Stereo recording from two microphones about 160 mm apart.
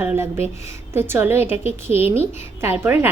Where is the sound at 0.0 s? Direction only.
15° right (ahead or behind).